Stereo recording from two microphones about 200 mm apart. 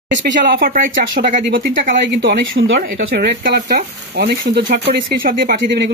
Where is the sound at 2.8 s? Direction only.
50° right (ahead or behind).